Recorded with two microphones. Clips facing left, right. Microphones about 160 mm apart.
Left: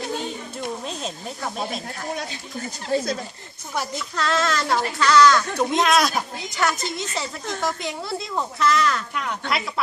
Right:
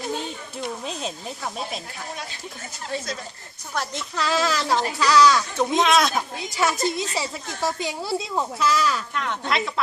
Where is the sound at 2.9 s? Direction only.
35° left (ahead or behind).